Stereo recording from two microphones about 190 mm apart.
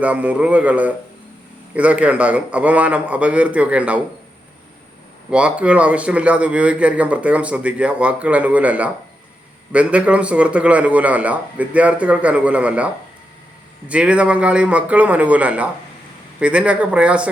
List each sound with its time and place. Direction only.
0.0 s a man's voice: 5° right (ahead or behind)
5.3 s a man's voice: 5° right (ahead or behind)